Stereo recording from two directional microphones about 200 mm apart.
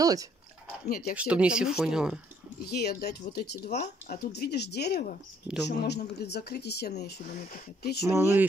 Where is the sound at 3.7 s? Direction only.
35° left (ahead or behind).